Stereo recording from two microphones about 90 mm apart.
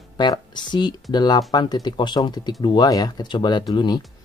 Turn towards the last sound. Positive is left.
turn(degrees=55)  # may be behind; listen again after turning